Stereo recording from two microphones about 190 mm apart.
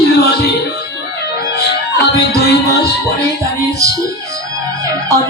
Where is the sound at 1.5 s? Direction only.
60° left (ahead or behind).